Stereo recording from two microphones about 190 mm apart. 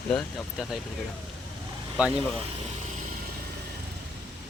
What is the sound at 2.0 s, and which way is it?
Speech, 5° right (ahead or behind).